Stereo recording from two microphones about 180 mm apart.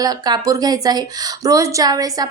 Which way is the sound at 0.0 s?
20° right (ahead or behind).